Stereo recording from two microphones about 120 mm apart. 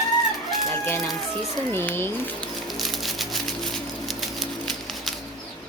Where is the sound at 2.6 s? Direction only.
Centre (ahead or behind).